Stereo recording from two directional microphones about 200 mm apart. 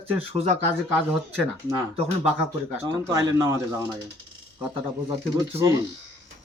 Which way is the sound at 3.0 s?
15° right (ahead or behind).